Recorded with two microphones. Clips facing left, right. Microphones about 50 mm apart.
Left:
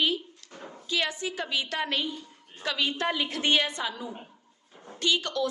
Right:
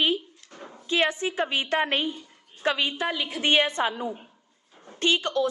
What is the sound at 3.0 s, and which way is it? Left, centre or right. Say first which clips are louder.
Speech: even; centre.